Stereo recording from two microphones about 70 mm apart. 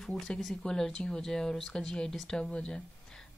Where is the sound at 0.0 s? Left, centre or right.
Centre.